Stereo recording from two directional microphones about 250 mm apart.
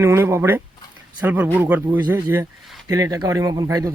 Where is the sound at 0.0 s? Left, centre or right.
Centre.